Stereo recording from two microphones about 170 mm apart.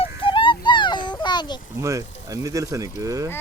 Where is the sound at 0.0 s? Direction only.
30° left (ahead or behind).